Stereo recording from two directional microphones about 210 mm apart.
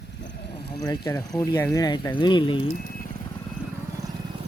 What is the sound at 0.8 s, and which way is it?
Speech, 15° left (ahead or behind).